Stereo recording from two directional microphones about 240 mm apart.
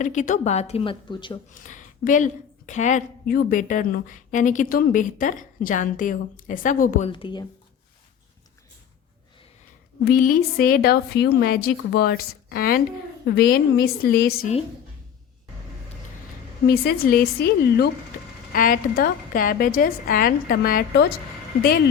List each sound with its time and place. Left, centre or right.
0.0 s a woman's voice: left
1.6 s a woman's voice: left
7.1 s a woman's voice: centre
10.0 s a woman's voice: left
16.6 s a woman's voice: left